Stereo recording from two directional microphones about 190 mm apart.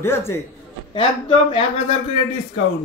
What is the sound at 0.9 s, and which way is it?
Speech, 30° left (ahead or behind).